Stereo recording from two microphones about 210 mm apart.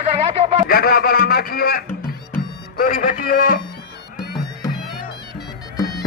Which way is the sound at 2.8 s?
40° left (ahead or behind).